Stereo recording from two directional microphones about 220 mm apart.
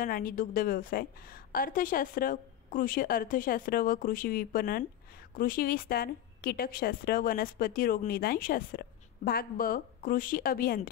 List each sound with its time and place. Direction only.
0.0 s a woman's voice: 40° left (ahead or behind)